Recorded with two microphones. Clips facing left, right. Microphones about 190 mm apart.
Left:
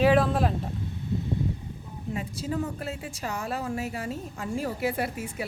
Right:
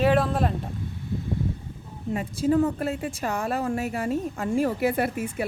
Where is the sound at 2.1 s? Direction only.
50° right (ahead or behind).